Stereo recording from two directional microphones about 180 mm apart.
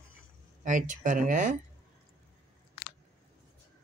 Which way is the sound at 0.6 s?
45° right (ahead or behind).